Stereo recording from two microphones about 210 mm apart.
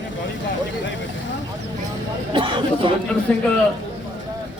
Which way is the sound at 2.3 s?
25° right (ahead or behind).